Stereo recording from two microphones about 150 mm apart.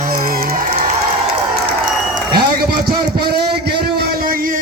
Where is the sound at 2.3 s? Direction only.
85° right.